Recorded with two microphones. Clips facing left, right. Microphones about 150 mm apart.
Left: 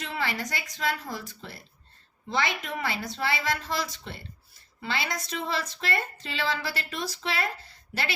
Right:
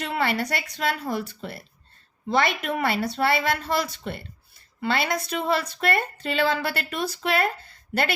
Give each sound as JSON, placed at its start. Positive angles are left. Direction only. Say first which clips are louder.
{"t": 0.0, "sound": "a woman's voice", "louder": "right 6 dB", "side_deg": -60}